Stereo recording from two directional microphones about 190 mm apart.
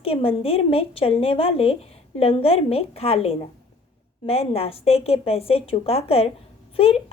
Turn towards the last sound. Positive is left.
turn(degrees=30)  # may be behind; listen again after turning